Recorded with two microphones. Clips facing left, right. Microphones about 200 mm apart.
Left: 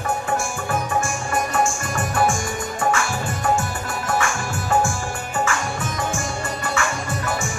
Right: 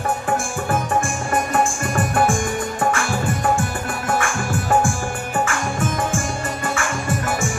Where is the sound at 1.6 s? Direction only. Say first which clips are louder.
Right 3 dB; 55° right (ahead or behind).